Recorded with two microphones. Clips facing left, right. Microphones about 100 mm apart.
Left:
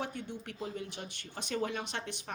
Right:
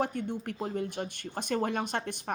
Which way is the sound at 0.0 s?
50° right (ahead or behind).